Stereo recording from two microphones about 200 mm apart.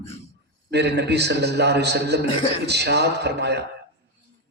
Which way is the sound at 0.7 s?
55° right (ahead or behind).